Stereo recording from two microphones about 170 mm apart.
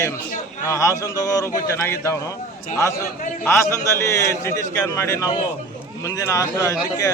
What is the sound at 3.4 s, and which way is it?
A man's voice, 15° left (ahead or behind).